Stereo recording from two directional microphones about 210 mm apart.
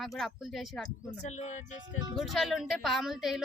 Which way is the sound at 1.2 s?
35° left (ahead or behind).